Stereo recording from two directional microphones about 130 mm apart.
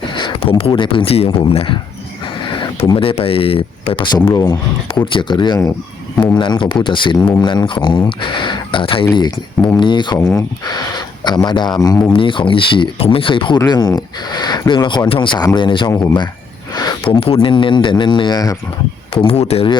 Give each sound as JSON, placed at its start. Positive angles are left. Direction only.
{"t": 0.1, "sound": "a sound", "side_deg": 35}
{"t": 0.3, "sound": "speech", "side_deg": 45}
{"t": 10.2, "sound": "speech", "side_deg": 25}
{"t": 12.1, "sound": "speech", "side_deg": 40}
{"t": 17.2, "sound": "speech", "side_deg": 45}
{"t": 19.1, "sound": "speech", "side_deg": 50}